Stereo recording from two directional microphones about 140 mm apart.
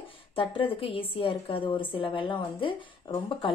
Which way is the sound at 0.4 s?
40° left (ahead or behind).